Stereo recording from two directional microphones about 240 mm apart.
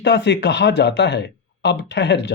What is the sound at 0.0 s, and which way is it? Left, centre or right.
A man's voice, left.